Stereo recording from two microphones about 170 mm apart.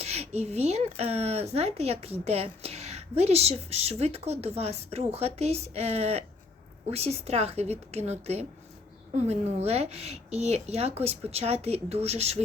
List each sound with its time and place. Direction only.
0.0 s speech: 35° right (ahead or behind)